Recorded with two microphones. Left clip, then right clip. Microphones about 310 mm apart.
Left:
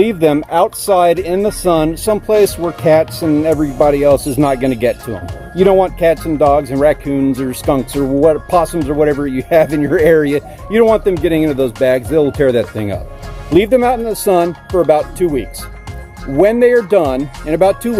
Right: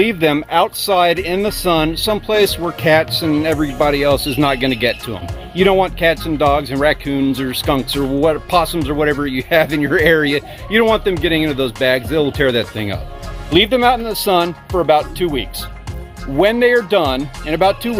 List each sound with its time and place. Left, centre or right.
0.0 s speech: right
1.9 s speech: centre
2.8 s speech: right
3.1 s speech: centre
3.3 s speech: centre
7.3 s speech: centre
8.0 s speech: centre
8.6 s speech: centre
8.9 s speech: centre
14.3 s speech: centre
14.8 s speech: centre
17.0 s speech: centre
17.5 s speech: centre